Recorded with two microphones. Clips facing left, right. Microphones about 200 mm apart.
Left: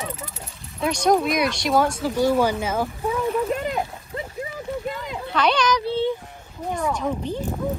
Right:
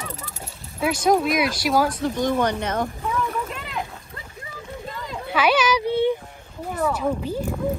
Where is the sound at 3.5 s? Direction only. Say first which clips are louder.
Left 9 dB; 40° left (ahead or behind).